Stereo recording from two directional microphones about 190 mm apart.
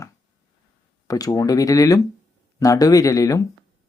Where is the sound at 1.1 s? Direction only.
20° left (ahead or behind).